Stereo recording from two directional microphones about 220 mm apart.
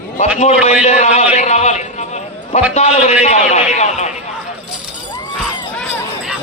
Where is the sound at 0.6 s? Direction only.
30° left (ahead or behind).